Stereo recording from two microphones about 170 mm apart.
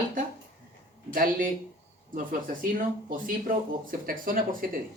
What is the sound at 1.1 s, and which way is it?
Speech, 55° right (ahead or behind).